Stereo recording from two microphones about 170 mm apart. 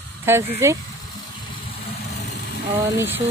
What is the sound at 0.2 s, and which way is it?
Speech, 15° right (ahead or behind).